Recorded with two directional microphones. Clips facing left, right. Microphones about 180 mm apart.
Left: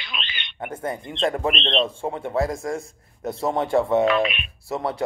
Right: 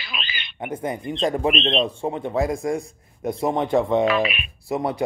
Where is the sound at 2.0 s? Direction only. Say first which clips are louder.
Right 1 dB; 20° right (ahead or behind).